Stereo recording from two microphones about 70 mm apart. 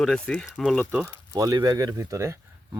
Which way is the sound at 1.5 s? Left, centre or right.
Right.